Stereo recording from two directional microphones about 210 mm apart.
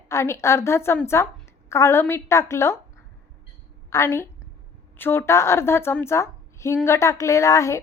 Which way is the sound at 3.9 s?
10° left (ahead or behind).